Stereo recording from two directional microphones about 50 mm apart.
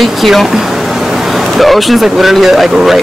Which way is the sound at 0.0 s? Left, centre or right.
Centre.